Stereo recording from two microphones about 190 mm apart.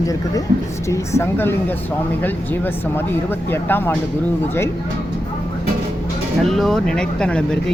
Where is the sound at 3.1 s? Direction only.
10° left (ahead or behind).